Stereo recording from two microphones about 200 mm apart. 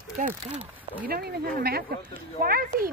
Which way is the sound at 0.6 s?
10° right (ahead or behind).